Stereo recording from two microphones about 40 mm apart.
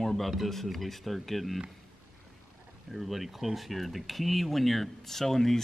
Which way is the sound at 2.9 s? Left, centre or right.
Centre.